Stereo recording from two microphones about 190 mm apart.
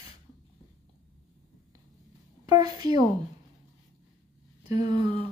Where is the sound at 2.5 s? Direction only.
20° right (ahead or behind).